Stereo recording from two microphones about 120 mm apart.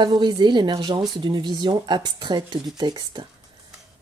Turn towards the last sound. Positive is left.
turn(degrees=-35)  # may be behind; listen again after turning